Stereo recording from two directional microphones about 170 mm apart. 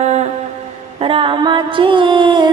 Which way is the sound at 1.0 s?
30° right (ahead or behind).